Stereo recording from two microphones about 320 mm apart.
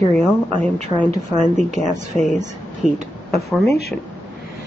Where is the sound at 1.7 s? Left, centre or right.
Right.